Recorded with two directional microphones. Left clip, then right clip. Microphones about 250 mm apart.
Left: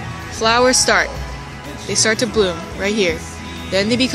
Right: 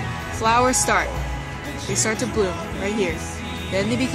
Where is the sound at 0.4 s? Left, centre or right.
Centre.